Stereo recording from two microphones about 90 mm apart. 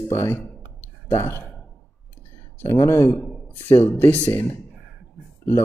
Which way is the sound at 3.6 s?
30° left (ahead or behind).